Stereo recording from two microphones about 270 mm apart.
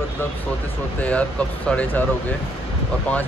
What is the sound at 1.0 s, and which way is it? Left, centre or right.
Speech, centre.